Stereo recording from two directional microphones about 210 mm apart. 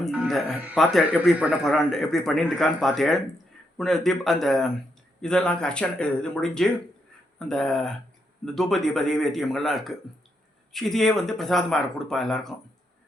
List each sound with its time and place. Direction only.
0.0 s speech: centre (ahead or behind)